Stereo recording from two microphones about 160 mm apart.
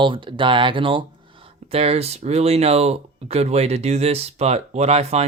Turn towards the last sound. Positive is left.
turn(degrees=-40)  # may be behind; listen again after turning